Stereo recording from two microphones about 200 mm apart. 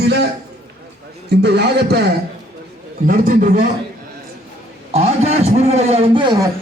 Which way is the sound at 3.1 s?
45° right (ahead or behind).